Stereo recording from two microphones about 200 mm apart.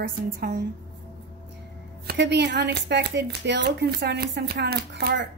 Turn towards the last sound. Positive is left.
turn(degrees=-60)  # may be behind; listen again after turning